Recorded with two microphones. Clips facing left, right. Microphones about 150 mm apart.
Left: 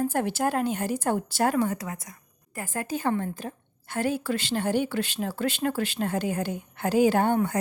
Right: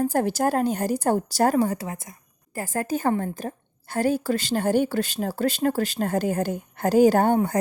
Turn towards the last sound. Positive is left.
turn(degrees=-40)  # may be behind; listen again after turning